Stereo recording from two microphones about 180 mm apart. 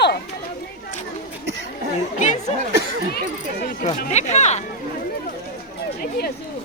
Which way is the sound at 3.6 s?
50° left (ahead or behind).